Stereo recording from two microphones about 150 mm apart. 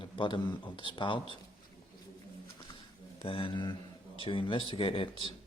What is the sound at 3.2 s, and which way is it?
Speech, 35° left (ahead or behind).